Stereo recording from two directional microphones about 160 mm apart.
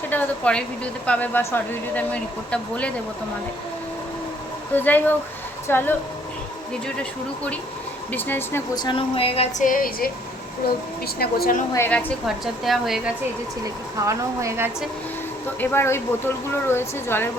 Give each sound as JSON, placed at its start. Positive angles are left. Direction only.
{"t": 0.1, "sound": "speech", "side_deg": 10}
{"t": 4.7, "sound": "speech", "side_deg": 10}
{"t": 8.1, "sound": "speech", "side_deg": 15}
{"t": 8.7, "sound": "speech", "side_deg": 25}
{"t": 9.6, "sound": "a woman's voice", "side_deg": 60}
{"t": 11.0, "sound": "speech", "side_deg": 75}
{"t": 11.7, "sound": "speech", "side_deg": 10}
{"t": 12.2, "sound": "a woman's voice", "side_deg": 0}
{"t": 14.1, "sound": "a woman's voice", "side_deg": -15}
{"t": 15.6, "sound": "speech", "side_deg": 15}